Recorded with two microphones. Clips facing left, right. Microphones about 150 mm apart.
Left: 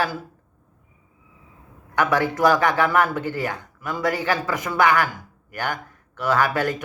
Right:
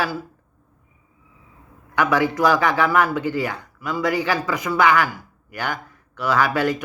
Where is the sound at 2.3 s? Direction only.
45° left (ahead or behind).